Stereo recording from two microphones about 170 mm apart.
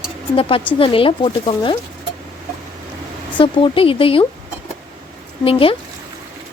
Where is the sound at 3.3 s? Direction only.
30° left (ahead or behind).